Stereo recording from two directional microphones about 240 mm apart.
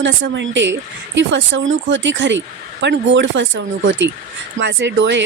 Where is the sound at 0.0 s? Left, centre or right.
Right.